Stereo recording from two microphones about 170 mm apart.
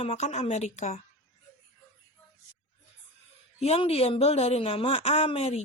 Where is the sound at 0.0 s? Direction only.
40° left (ahead or behind).